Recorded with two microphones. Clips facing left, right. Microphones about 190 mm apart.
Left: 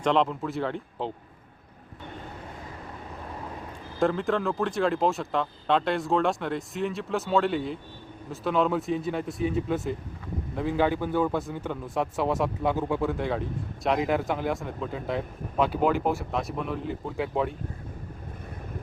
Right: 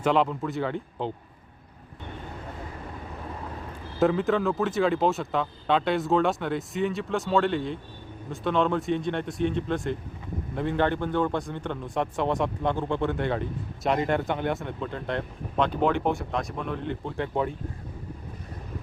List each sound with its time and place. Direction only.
0.0 s a man's voice: 5° right (ahead or behind)
4.0 s a man's voice: centre (ahead or behind)